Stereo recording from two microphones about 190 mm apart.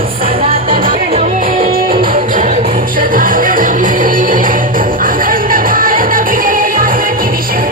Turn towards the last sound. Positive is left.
turn(degrees=-50)  # may be behind; listen again after turning